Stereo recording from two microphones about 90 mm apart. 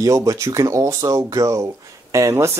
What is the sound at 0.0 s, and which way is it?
Speech, 40° right (ahead or behind).